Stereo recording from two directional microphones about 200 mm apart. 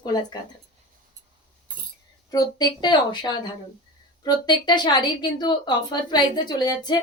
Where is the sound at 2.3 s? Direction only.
20° left (ahead or behind).